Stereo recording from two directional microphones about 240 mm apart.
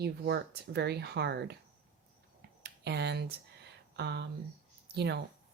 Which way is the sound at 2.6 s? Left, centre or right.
Right.